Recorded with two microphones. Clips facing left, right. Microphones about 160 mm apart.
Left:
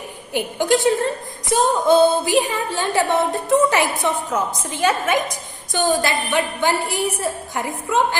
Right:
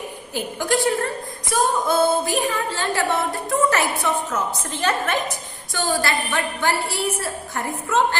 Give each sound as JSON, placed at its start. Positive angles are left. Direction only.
{"t": 0.6, "sound": "a woman's voice", "side_deg": 20}